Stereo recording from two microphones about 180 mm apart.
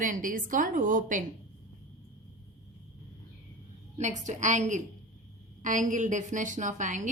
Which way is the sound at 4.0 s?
40° right (ahead or behind).